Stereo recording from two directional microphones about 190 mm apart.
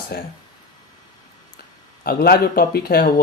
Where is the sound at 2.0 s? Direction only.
50° left (ahead or behind).